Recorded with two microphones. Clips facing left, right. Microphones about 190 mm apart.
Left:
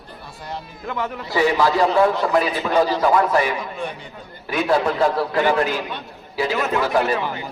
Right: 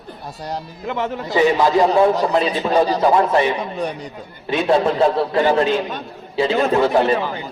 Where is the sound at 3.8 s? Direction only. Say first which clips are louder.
Right 5 dB; 40° right (ahead or behind).